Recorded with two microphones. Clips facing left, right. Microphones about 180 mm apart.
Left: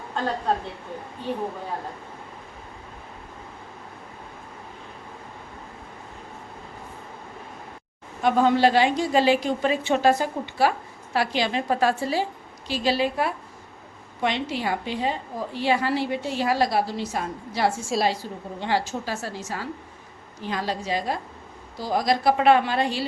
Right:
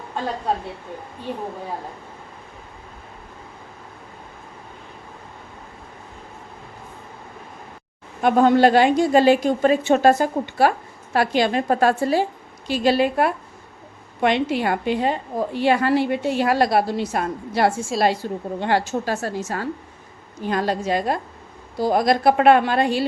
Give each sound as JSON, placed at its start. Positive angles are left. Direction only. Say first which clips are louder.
{"t": 8.2, "sound": "a woman's voice", "louder": "right 4 dB", "side_deg": -55}